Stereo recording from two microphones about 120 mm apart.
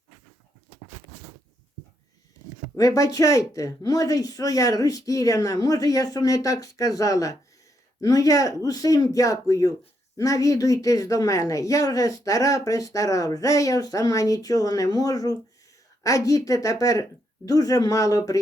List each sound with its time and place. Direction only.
2.7 s speech: 30° left (ahead or behind)